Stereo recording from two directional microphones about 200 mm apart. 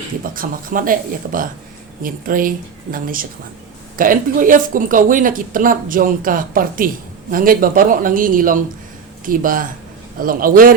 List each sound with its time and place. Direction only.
0.2 s speech: 45° right (ahead or behind)